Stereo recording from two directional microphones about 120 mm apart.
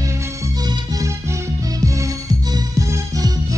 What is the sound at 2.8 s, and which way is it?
Music, 30° right (ahead or behind).